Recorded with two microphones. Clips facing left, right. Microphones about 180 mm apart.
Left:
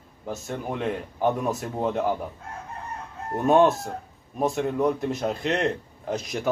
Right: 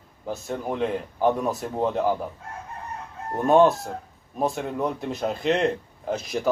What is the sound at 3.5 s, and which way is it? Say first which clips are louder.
Speech: right 1 dB; centre (ahead or behind).